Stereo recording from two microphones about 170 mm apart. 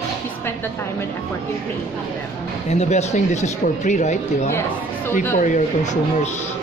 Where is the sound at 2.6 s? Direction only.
40° left (ahead or behind).